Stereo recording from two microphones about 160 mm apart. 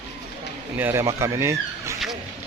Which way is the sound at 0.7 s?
15° right (ahead or behind).